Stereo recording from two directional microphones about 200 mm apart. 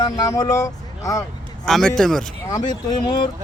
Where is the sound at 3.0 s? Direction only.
20° left (ahead or behind).